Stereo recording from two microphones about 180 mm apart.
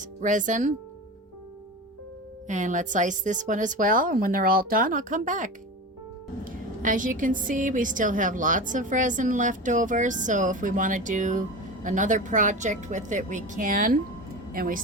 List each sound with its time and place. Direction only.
0.0 s a woman's voice: 45° right (ahead or behind)
2.5 s a woman's voice: 45° right (ahead or behind)